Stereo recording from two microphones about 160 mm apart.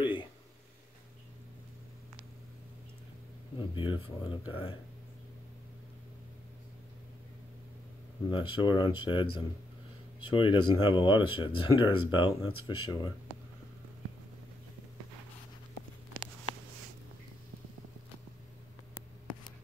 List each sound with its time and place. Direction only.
0.0 s a sound: 30° left (ahead or behind)
3.5 s speech: 30° left (ahead or behind)
8.3 s speech: 30° left (ahead or behind)